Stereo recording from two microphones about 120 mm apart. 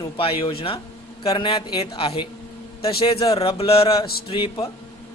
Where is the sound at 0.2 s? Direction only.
50° left (ahead or behind).